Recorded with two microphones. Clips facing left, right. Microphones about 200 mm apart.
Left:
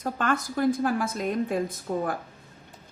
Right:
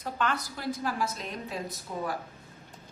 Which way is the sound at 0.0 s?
45° left (ahead or behind).